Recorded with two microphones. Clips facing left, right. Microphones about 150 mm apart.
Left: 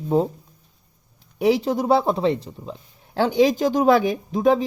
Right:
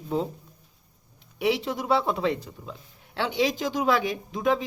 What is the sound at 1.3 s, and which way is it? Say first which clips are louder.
Speech: left 7 dB; 40° left (ahead or behind).